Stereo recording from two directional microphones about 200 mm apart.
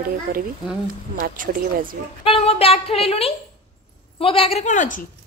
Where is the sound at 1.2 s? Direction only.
40° right (ahead or behind).